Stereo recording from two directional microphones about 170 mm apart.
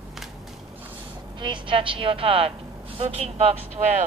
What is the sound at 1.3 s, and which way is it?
A woman's voice, 30° right (ahead or behind).